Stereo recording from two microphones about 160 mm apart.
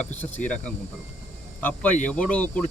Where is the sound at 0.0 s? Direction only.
10° left (ahead or behind).